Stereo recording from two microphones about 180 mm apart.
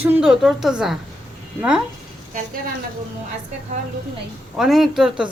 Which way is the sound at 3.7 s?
40° right (ahead or behind).